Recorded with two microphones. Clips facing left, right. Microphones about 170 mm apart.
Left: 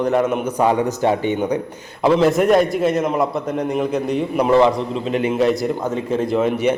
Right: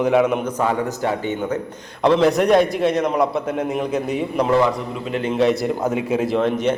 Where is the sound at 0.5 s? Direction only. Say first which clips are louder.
Left 4 dB; 20° left (ahead or behind).